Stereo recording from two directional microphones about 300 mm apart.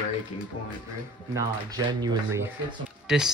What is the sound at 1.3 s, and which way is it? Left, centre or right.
Speech, centre.